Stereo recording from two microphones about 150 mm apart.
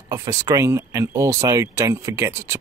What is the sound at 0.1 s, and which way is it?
Speech, 20° right (ahead or behind).